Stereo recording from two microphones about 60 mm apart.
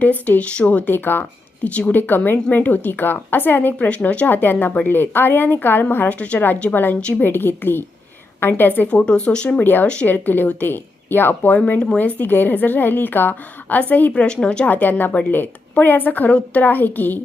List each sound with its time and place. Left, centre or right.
0.0 s speech: left
0.9 s a woman's voice: left
3.8 s speech: left
4.3 s a woman's voice: left
6.1 s a woman's voice: left
8.9 s speech: centre
9.6 s a woman's voice: left
9.8 s speech: centre
10.1 s a woman's voice: left
11.5 s speech: left
11.9 s a woman's voice: left
14.1 s speech: centre
14.7 s a woman's voice: left